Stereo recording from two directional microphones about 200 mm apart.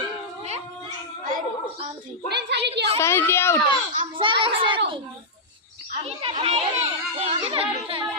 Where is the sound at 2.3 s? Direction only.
55° right (ahead or behind).